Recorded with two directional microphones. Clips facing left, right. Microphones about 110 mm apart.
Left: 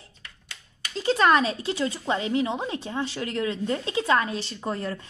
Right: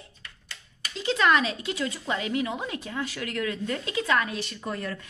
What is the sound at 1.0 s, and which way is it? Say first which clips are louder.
A woman's voice: left 3 dB; 35° left (ahead or behind).